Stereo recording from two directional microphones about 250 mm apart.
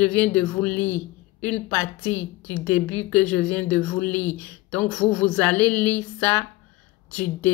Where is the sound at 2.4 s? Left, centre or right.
Centre.